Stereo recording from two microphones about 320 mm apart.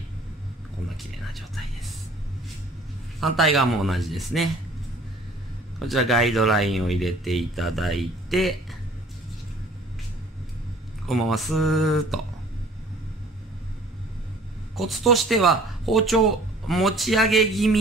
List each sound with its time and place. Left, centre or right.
1.3 s speech: centre
3.3 s speech: centre
5.8 s speech: centre
11.1 s speech: centre
14.8 s speech: centre